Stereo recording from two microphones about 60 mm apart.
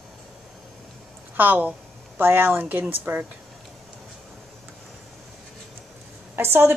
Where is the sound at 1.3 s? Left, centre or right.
Right.